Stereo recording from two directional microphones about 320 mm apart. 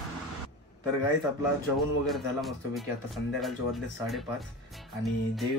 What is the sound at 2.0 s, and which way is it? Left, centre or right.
Speech, centre.